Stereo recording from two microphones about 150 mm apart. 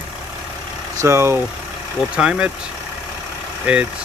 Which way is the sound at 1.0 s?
20° right (ahead or behind).